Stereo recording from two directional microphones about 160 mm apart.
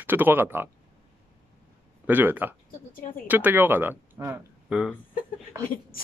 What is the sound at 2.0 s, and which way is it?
Speech, 10° right (ahead or behind).